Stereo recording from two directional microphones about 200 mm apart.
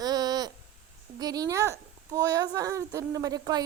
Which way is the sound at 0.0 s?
20° right (ahead or behind).